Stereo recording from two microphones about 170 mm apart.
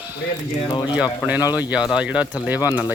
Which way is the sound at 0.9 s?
10° right (ahead or behind).